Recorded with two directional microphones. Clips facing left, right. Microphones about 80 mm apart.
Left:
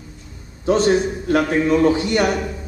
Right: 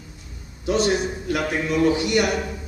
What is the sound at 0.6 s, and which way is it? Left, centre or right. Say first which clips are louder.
A man's voice: left 5 dB; left.